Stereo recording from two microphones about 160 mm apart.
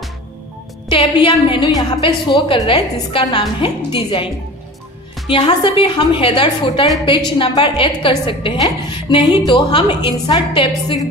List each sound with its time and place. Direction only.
0.8 s a woman's voice: 30° left (ahead or behind)
5.3 s a woman's voice: 30° left (ahead or behind)